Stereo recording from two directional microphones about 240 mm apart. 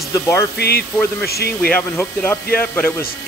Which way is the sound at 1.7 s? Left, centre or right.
Centre.